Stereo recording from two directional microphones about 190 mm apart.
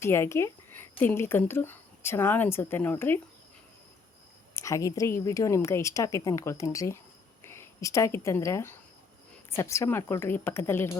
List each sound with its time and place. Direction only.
0.0 s speech: 15° left (ahead or behind)
4.5 s a woman's voice: 15° left (ahead or behind)